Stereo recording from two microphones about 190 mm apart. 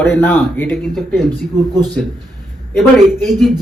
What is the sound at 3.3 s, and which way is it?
Speech, centre (ahead or behind).